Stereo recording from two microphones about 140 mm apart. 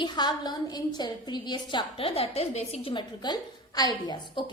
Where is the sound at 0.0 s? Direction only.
30° left (ahead or behind); by 2.9 s 50° left (ahead or behind).